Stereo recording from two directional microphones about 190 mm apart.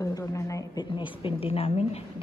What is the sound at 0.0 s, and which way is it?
Speech, 15° left (ahead or behind).